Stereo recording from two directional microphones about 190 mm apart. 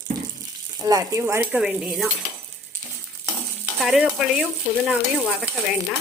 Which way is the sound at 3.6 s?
5° right (ahead or behind).